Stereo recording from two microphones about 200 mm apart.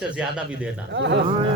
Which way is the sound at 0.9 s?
60° right (ahead or behind).